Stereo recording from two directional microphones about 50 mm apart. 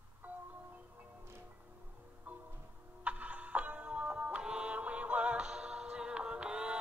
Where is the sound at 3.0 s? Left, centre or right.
Right.